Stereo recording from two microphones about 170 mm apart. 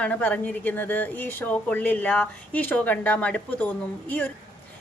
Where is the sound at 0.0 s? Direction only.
10° left (ahead or behind).